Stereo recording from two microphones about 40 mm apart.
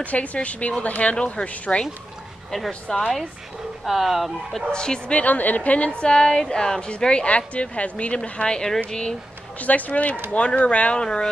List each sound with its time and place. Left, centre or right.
0.0 s speech: left
2.5 s speech: centre
3.8 s speech: centre
4.7 s speech: left
5.2 s speech: left
5.9 s speech: left
8.2 s speech: left
9.6 s speech: left
11.0 s speech: left